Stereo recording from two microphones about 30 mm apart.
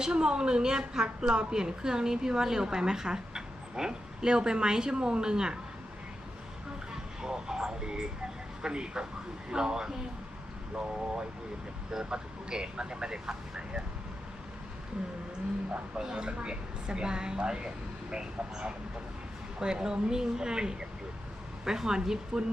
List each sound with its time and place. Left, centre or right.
0.0 s a woman's voice: right
7.2 s a woman's voice: right
16.0 s a woman's voice: right